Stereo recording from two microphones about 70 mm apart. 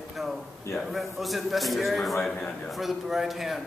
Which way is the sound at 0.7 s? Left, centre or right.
Centre.